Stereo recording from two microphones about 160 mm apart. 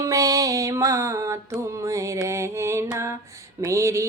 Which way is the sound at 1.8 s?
20° right (ahead or behind).